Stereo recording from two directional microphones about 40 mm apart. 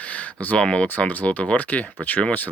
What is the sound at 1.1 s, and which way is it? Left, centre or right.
Speech, left.